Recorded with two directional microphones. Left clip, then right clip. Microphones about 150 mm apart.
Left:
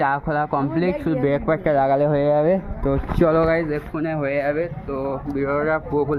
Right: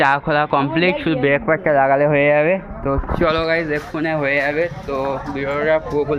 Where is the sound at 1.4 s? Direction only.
25° left (ahead or behind).